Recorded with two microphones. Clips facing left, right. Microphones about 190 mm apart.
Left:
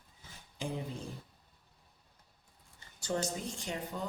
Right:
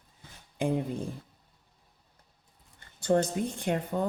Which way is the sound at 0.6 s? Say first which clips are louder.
Right 10 dB; 55° right (ahead or behind).